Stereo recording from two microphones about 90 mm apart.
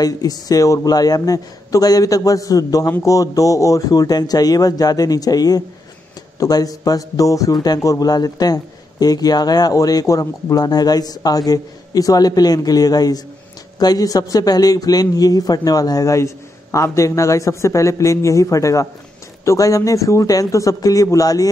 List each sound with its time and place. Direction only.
0.0 s a man's voice: 45° left (ahead or behind)